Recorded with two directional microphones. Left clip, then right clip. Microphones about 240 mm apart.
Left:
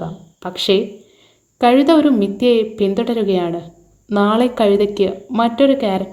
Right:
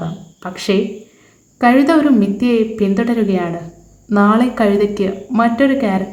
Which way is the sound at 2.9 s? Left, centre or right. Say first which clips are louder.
Even; left.